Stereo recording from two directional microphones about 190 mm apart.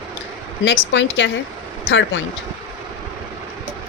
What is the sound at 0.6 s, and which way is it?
Speech, 70° left (ahead or behind).